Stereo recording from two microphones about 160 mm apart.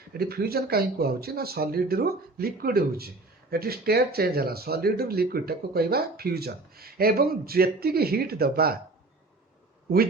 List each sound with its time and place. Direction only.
0.1 s speech: 75° right (ahead or behind)